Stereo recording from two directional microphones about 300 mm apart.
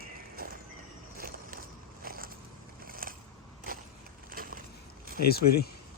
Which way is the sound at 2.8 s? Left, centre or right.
Right.